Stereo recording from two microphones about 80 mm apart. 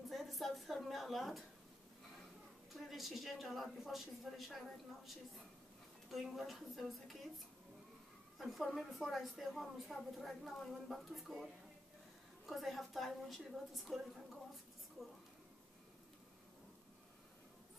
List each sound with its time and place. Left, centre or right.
0.1 s a sound: centre
2.7 s a woman's voice: centre
8.4 s a woman's voice: centre